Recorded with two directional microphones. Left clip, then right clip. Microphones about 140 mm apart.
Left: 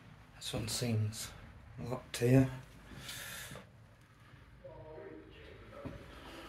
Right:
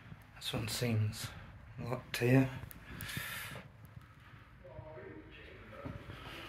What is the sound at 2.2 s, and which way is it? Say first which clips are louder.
Speech: left 1 dB; 50° left (ahead or behind).